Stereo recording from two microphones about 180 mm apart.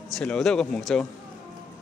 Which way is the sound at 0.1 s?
5° left (ahead or behind).